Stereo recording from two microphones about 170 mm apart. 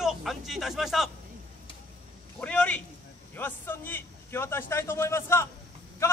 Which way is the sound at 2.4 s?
5° left (ahead or behind).